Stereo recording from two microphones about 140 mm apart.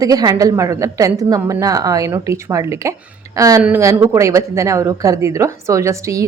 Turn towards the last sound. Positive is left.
turn(degrees=-20)  # may be behind; listen again after turning